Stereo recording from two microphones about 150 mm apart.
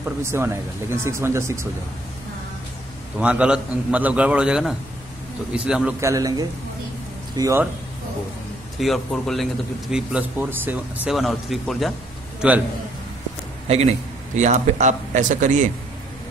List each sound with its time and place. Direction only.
0.0 s speech: 15° right (ahead or behind)
3.2 s speech: 5° right (ahead or behind)
5.9 s a man's voice: 20° right (ahead or behind)
8.7 s speech: centre (ahead or behind)
11.1 s speech: centre (ahead or behind)
12.4 s a man's voice: 10° right (ahead or behind)
13.7 s a man's voice: 45° right (ahead or behind)